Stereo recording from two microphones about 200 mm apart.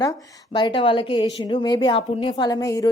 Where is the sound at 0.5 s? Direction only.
25° left (ahead or behind).